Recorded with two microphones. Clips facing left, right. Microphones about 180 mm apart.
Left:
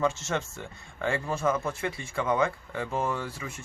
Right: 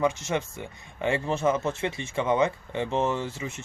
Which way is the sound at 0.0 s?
15° right (ahead or behind).